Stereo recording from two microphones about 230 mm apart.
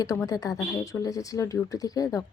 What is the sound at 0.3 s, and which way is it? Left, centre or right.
Speech, centre.